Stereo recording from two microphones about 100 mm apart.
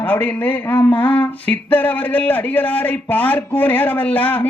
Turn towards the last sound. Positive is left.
turn(degrees=15)  # may be behind; listen again after turning